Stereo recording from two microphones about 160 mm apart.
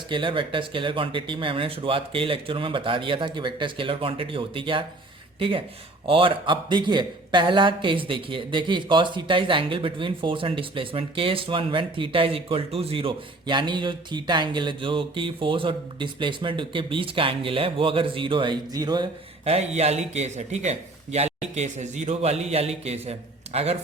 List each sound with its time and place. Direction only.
0.1 s speech: 30° right (ahead or behind)
19.5 s a man's voice: 40° right (ahead or behind)